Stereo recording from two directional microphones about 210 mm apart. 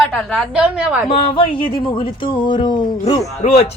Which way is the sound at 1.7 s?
25° left (ahead or behind).